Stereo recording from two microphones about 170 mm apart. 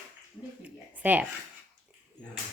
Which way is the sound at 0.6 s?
10° right (ahead or behind).